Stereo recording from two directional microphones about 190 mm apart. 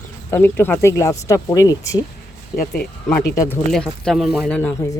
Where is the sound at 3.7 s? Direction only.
5° left (ahead or behind).